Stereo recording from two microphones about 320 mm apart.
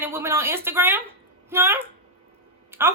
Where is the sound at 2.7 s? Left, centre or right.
Centre.